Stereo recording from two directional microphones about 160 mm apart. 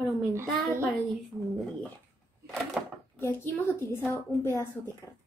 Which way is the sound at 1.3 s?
Centre (ahead or behind).